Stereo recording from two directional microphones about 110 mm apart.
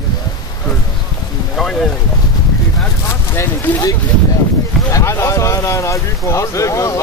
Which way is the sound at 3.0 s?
20° left (ahead or behind).